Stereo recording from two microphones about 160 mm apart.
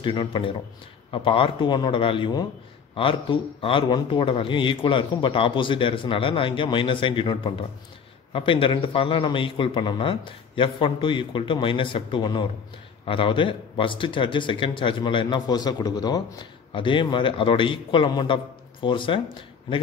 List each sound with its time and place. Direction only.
0.0 s speech: 30° left (ahead or behind)